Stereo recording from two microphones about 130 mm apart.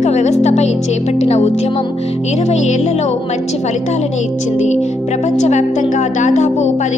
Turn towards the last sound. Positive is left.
turn(degrees=70)  # may be behind; listen again after turning